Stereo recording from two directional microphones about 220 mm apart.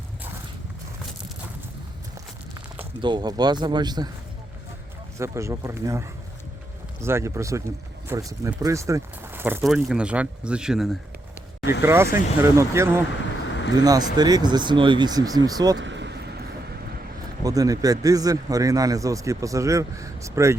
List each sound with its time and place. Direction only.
3.0 s speech: 20° right (ahead or behind)
5.1 s speech: 15° right (ahead or behind)
15.8 s vehicle: 55° right (ahead or behind)
17.4 s speech: 15° right (ahead or behind)